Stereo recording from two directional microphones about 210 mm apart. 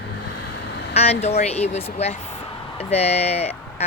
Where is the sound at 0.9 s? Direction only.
30° left (ahead or behind).